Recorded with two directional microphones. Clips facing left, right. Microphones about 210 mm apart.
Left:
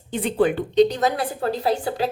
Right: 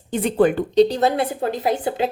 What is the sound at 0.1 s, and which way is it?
A woman's voice, 45° right (ahead or behind).